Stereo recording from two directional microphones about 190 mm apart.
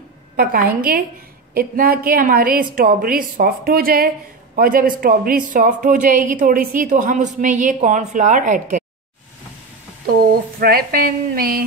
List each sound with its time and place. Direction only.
0.4 s speech: 50° right (ahead or behind)
10.0 s speech: 50° right (ahead or behind)